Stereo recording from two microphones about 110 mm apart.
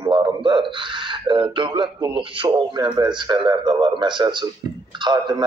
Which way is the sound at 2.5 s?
40° right (ahead or behind).